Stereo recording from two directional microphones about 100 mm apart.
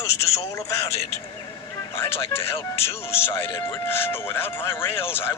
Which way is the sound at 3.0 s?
25° left (ahead or behind).